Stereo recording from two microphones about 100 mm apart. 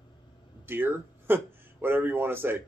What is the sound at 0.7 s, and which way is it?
Speech, 20° right (ahead or behind).